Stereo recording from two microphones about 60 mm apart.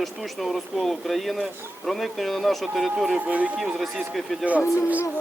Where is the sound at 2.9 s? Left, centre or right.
Centre.